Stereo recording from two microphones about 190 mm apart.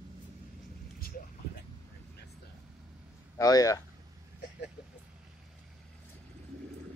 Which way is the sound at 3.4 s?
20° left (ahead or behind).